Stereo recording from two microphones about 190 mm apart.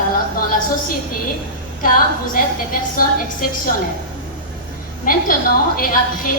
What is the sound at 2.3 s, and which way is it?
A woman's voice, 50° left (ahead or behind).